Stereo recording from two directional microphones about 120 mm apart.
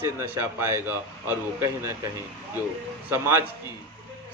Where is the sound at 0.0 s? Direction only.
20° right (ahead or behind).